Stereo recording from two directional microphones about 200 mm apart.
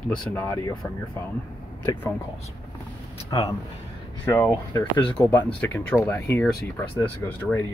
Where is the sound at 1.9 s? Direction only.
15° left (ahead or behind).